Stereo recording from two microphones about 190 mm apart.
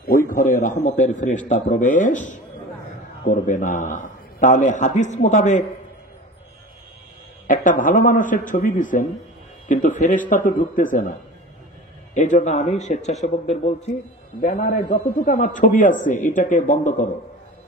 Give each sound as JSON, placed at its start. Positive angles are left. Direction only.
{"t": 0.6, "sound": "a man's voice", "side_deg": 45}
{"t": 7.4, "sound": "a man's voice", "side_deg": 45}
{"t": 9.7, "sound": "a sound", "side_deg": 40}
{"t": 10.3, "sound": "a man's voice", "side_deg": 45}